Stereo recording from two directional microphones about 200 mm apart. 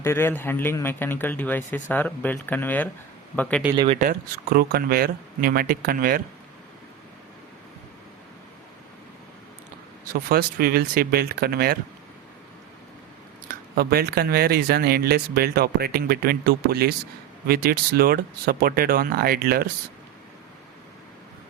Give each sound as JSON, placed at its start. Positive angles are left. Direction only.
{"t": 0.0, "sound": "speech", "side_deg": 10}
{"t": 4.0, "sound": "speech", "side_deg": -50}
{"t": 10.1, "sound": "speech", "side_deg": -45}
{"t": 13.5, "sound": "speech", "side_deg": -50}